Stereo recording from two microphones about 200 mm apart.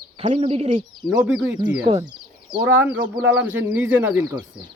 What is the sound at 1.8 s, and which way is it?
Speech, 25° right (ahead or behind).